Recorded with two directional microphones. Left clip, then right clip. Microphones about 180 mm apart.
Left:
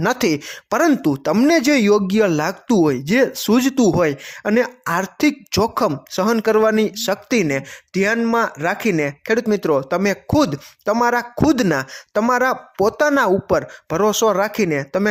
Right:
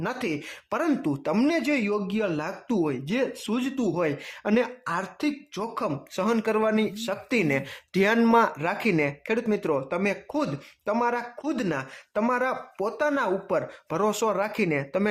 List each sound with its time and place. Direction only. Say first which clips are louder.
0.0 s speech: left 11 dB; 45° left (ahead or behind)
1.5 s speech: left 13 dB; 45° left (ahead or behind)
4.0 s speech: left 8 dB; 30° left (ahead or behind); by 5.9 s 45° left (ahead or behind)
6.1 s speech: left 9 dB; 35° left (ahead or behind)
7.9 s speech: left 3 dB; 15° left (ahead or behind); by 15.0 s 30° left (ahead or behind)